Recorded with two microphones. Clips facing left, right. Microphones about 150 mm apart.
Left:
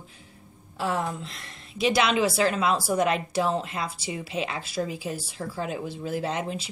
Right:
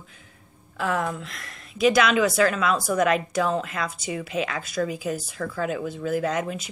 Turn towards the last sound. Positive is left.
turn(degrees=30)  # may be behind; listen again after turning